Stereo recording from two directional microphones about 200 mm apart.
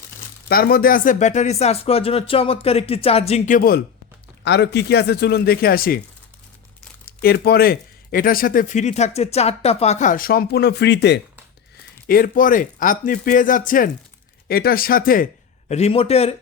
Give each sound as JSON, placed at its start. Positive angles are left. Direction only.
{"t": 0.4, "sound": "speech", "side_deg": 50}
{"t": 4.4, "sound": "speech", "side_deg": 60}
{"t": 7.0, "sound": "speech", "side_deg": 50}
{"t": 12.0, "sound": "speech", "side_deg": 45}
{"t": 15.7, "sound": "speech", "side_deg": 30}